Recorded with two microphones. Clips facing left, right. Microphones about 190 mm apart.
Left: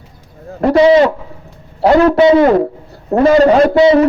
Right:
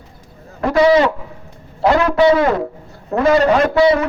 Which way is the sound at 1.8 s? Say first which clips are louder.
Left 6 dB; 35° left (ahead or behind).